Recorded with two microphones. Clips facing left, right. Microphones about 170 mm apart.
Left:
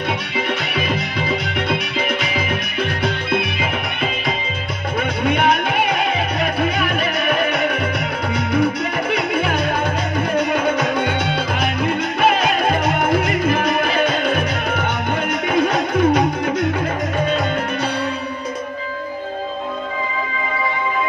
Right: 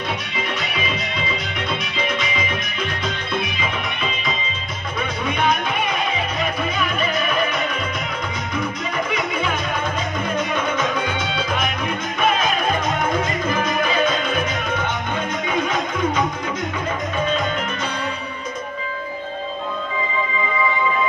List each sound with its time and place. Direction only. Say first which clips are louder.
0.7 s music: left 4 dB; 60° left (ahead or behind)